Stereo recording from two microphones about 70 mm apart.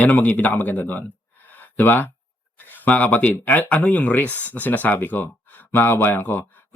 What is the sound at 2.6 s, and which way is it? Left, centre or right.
Speech, left.